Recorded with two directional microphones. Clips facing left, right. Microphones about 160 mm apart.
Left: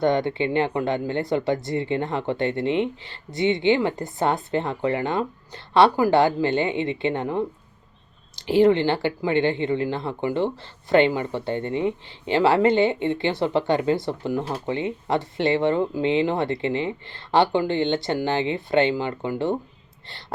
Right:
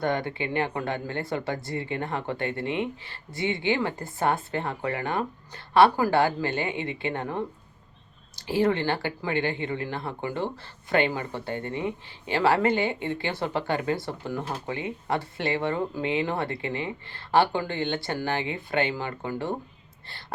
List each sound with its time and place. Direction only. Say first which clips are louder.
0.0 s speech: left 6 dB; 25° left (ahead or behind)